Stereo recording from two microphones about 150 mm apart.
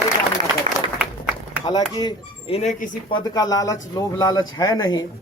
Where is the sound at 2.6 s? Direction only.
60° left (ahead or behind).